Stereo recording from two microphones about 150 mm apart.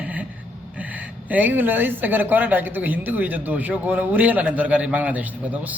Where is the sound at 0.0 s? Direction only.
10° right (ahead or behind).